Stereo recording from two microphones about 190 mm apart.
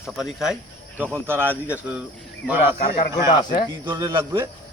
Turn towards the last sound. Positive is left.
turn(degrees=-25)  # may be behind; listen again after turning